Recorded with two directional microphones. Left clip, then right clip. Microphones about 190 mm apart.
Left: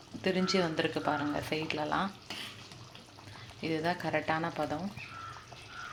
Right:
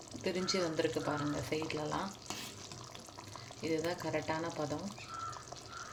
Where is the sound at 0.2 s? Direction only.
5° left (ahead or behind).